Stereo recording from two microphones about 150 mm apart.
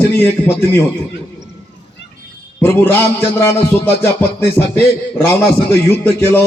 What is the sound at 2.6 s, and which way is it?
A man's voice, 15° left (ahead or behind).